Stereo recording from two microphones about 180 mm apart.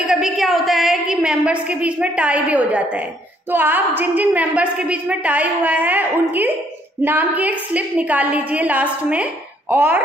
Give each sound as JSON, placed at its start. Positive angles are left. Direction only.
{"t": 0.0, "sound": "a woman's voice", "side_deg": -5}